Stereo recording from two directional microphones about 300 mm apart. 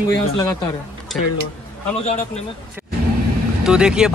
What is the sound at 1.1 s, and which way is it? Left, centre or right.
Speech, centre.